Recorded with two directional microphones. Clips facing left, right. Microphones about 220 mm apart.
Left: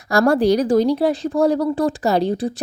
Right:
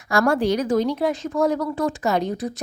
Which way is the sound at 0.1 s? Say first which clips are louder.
Left 4 dB; 35° left (ahead or behind).